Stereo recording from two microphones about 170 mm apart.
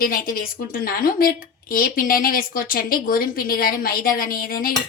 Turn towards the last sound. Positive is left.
turn(degrees=60)  # may be behind; listen again after turning